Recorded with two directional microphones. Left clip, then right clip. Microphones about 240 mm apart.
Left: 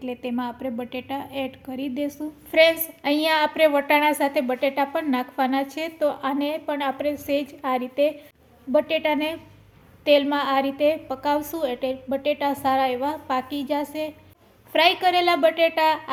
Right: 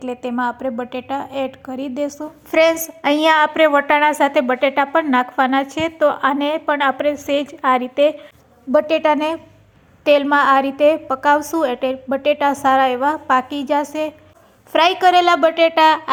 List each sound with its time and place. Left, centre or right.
0.0 s a woman's voice: centre